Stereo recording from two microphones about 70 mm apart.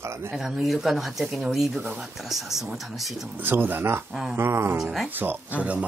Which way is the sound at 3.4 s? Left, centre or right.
Right.